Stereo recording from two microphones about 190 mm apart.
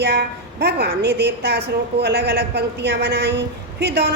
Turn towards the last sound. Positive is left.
turn(degrees=-60)  # may be behind; listen again after turning